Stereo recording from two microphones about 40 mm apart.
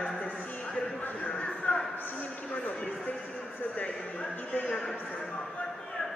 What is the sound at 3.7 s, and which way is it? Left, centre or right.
A man's voice, left.